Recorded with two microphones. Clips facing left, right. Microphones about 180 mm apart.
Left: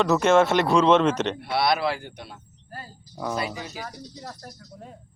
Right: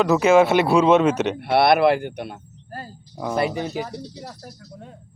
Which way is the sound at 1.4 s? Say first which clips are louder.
Right 7 dB; 60° right (ahead or behind).